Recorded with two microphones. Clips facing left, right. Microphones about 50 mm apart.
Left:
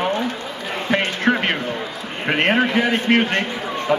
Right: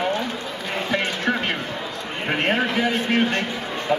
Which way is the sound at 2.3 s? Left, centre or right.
Left.